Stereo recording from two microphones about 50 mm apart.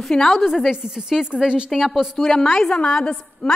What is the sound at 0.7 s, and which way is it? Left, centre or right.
A woman's voice, centre.